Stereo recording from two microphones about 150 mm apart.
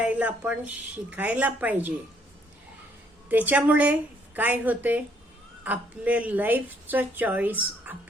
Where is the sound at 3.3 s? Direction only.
10° right (ahead or behind).